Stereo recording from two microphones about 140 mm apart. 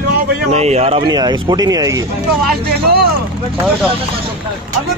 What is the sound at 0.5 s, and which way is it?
Speech, 50° right (ahead or behind).